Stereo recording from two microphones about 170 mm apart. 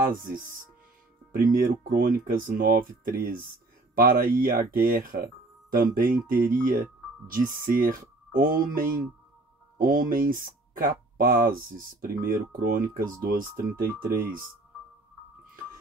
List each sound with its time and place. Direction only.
0.1 s speech: 55° right (ahead or behind)